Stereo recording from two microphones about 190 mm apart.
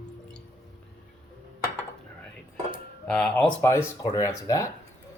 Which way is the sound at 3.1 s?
5° left (ahead or behind).